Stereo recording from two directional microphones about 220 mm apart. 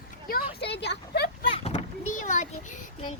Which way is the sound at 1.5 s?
30° left (ahead or behind).